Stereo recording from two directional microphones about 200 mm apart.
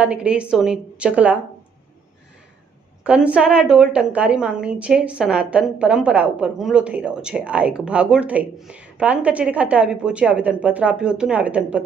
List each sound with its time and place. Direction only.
0.0 s a woman's voice: 5° right (ahead or behind)
3.0 s a woman's voice: 5° right (ahead or behind)